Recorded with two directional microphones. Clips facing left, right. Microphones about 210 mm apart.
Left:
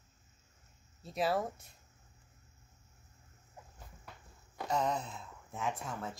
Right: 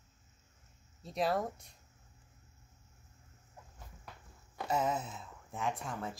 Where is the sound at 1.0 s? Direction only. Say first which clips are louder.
Even; 5° left (ahead or behind).